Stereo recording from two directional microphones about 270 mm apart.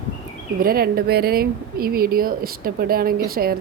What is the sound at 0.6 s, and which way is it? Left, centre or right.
Speech, right.